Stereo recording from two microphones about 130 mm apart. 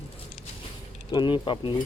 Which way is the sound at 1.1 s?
35° left (ahead or behind).